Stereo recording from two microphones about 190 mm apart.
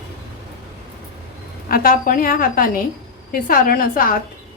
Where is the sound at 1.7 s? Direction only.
50° left (ahead or behind).